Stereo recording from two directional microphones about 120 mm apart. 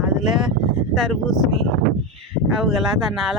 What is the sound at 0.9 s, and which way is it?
Speech, centre (ahead or behind).